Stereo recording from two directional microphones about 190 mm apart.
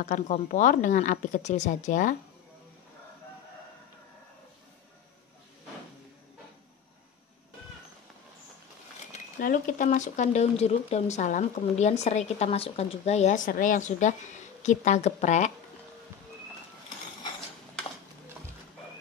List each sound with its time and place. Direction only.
0.0 s speech: 40° left (ahead or behind)
9.1 s speech: 45° left (ahead or behind)